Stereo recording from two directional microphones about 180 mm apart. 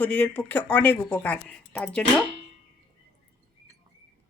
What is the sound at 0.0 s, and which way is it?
Speech, 10° left (ahead or behind).